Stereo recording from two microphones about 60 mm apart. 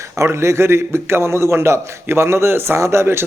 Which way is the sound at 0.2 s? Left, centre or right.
Right.